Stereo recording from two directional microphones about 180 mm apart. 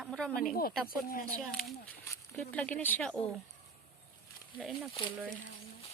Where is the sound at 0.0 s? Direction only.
5° left (ahead or behind).